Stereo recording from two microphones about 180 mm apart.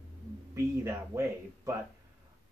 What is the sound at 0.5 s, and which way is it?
A man's voice, 15° right (ahead or behind).